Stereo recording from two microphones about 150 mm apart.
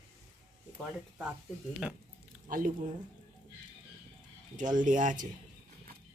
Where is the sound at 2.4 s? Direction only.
65° right (ahead or behind).